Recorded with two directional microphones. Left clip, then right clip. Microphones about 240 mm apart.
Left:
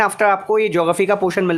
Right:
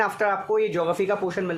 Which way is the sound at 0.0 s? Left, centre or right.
Left.